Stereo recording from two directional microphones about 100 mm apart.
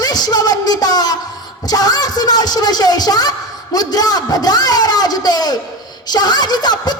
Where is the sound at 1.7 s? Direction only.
40° left (ahead or behind).